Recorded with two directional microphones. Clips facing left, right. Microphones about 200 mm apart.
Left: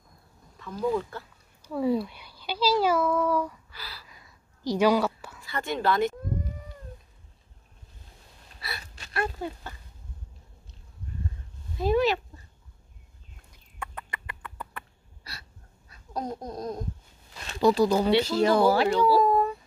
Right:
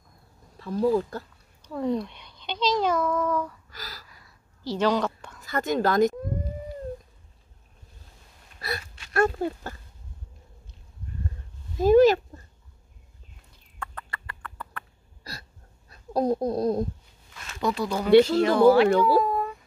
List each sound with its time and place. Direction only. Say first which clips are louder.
0.6 s speech: right 5 dB; 35° right (ahead or behind)
1.6 s a child's voice: left 1 dB; 5° left (ahead or behind)
3.7 s gasp: right 2 dB; 40° right (ahead or behind)
4.1 s whispering: left 1 dB; 15° left (ahead or behind)
5.4 s a woman's voice: right 4 dB; 40° right (ahead or behind)
8.5 s gasp: right 7 dB; 45° right (ahead or behind)
9.1 s a woman's voice: right 7 dB; 45° right (ahead or behind)
11.8 s a woman's voice: right 7 dB; 45° right (ahead or behind)
13.7 s a sound: even; 20° left (ahead or behind)
15.9 s speech: right 9 dB; 35° right (ahead or behind)
17.3 s a sound: left 6 dB; 35° left (ahead or behind)
18.3 s speech: right 4 dB; 35° left (ahead or behind)
18.9 s a woman's voice: right 1 dB; 50° right (ahead or behind)